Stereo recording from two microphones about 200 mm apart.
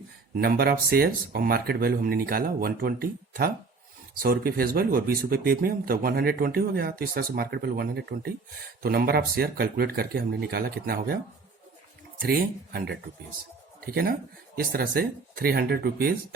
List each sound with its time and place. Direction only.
0.3 s speech: 50° right (ahead or behind)
12.2 s speech: 45° right (ahead or behind)